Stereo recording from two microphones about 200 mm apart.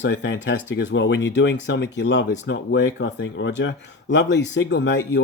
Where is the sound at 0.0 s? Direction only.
65° left (ahead or behind).